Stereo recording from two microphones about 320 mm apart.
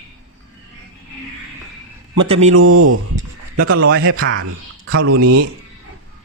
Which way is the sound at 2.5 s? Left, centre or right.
Right.